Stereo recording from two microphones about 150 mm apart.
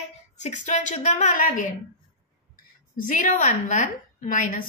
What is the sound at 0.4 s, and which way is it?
A woman's voice, 50° left (ahead or behind).